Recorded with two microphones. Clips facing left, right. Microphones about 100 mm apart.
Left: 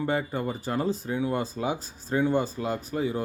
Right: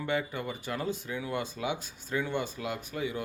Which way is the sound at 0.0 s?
35° left (ahead or behind).